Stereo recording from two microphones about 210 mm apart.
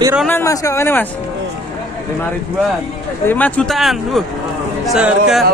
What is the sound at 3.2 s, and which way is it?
Speech, 10° left (ahead or behind).